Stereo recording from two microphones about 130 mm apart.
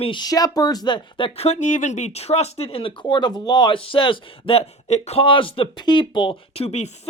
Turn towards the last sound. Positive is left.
turn(degrees=60)  # may be behind; listen again after turning